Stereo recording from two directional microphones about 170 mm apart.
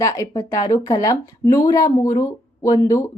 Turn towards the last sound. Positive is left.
turn(degrees=15)  # may be behind; listen again after turning